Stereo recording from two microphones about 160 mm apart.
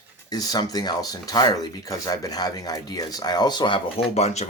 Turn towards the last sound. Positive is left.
turn(degrees=40)  # may be behind; listen again after turning